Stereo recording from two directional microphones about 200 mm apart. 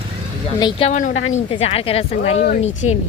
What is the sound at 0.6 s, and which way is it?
Speech, 25° left (ahead or behind).